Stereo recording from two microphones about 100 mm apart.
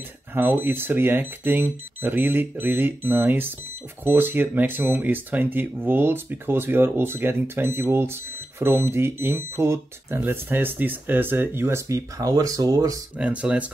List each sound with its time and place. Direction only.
0.3 s speech: 20° right (ahead or behind)
13.2 s speech: 15° right (ahead or behind)